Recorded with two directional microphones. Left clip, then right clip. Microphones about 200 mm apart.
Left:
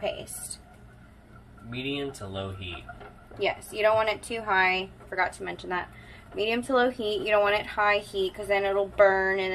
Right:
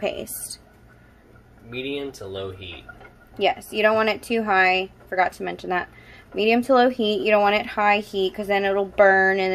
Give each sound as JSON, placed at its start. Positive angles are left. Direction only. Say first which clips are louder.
{"t": 1.7, "sound": "speech", "louder": "right 3 dB", "side_deg": -15}
{"t": 3.3, "sound": "a woman's voice", "louder": "right 6 dB", "side_deg": -60}